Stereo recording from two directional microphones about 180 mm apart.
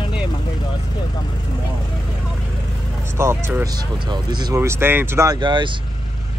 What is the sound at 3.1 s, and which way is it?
Speech, 15° right (ahead or behind).